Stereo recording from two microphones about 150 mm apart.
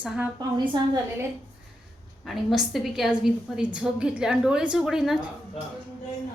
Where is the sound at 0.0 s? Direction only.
5° right (ahead or behind).